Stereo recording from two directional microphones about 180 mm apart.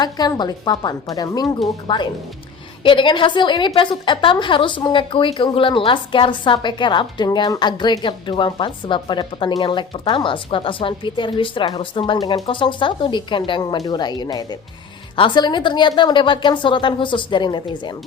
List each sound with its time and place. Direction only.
0.0 s a woman's voice: 25° left (ahead or behind)